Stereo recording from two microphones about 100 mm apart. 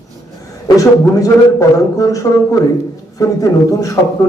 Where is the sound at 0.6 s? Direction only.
35° left (ahead or behind).